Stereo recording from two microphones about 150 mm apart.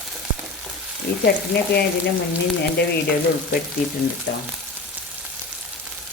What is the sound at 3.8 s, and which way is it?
Speech, 65° left (ahead or behind).